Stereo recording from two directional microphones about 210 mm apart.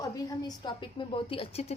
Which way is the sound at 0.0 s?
15° left (ahead or behind).